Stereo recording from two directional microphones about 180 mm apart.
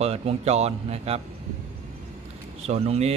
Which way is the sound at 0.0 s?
35° right (ahead or behind).